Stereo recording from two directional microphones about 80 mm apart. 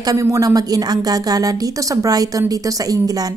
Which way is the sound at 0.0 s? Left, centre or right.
Right.